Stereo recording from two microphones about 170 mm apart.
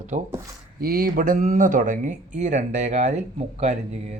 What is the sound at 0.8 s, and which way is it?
Speech, 60° right (ahead or behind).